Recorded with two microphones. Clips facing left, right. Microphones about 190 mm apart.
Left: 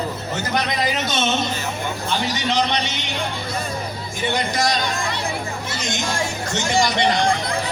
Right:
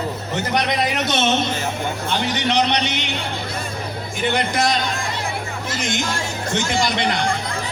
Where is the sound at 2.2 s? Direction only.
65° right (ahead or behind).